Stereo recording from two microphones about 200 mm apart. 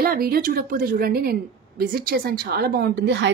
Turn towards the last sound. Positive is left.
turn(degrees=-60)  # may be behind; listen again after turning